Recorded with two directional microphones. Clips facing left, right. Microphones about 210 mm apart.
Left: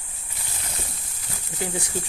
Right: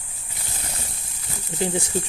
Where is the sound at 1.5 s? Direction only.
25° right (ahead or behind).